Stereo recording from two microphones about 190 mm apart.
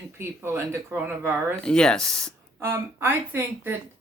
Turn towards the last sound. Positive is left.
turn(degrees=-10)  # may be behind; listen again after turning